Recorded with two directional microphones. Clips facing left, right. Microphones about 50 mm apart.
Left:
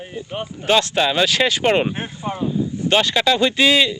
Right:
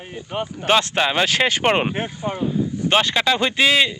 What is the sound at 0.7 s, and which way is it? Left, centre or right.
Speech, right.